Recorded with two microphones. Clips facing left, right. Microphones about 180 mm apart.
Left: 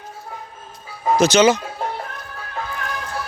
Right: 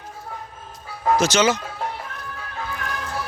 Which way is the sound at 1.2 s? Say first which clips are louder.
Left 7 dB; 15° left (ahead or behind).